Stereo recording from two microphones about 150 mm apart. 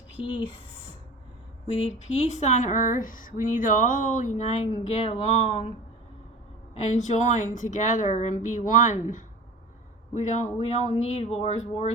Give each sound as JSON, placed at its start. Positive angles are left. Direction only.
{"t": 0.2, "sound": "a sound", "side_deg": 35}
{"t": 1.6, "sound": "speech", "side_deg": 45}
{"t": 6.7, "sound": "speech", "side_deg": 50}